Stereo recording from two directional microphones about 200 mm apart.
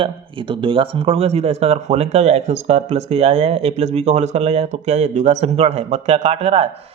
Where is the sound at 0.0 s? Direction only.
25° right (ahead or behind).